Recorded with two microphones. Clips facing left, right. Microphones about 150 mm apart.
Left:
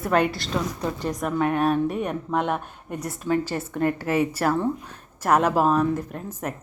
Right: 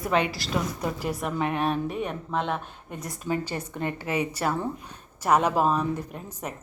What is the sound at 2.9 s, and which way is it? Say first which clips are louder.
Speech: left 6 dB; 65° left (ahead or behind).